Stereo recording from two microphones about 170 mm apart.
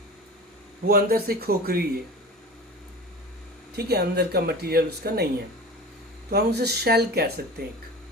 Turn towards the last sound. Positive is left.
turn(degrees=-70)  # may be behind; listen again after turning